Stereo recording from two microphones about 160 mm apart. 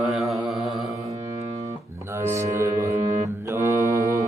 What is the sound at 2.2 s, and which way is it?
Music, 15° right (ahead or behind).